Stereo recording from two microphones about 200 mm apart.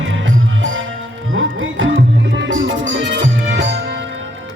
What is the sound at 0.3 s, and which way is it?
Music, 75° right (ahead or behind).